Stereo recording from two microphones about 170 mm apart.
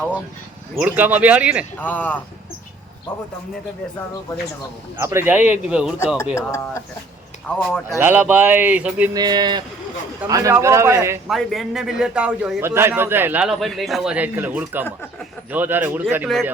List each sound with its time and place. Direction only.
0.8 s speech: 10° right (ahead or behind)
1.8 s speech: 10° left (ahead or behind)
4.9 s speech: 15° right (ahead or behind)
6.3 s speech: 15° left (ahead or behind)
7.9 s speech: 10° right (ahead or behind)
9.1 s speech: 25° right (ahead or behind)
11.3 s a man's voice: centre (ahead or behind)